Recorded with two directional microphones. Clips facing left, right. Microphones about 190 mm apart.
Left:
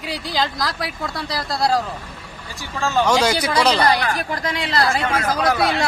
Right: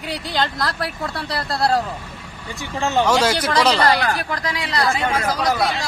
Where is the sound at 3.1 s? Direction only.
Centre (ahead or behind).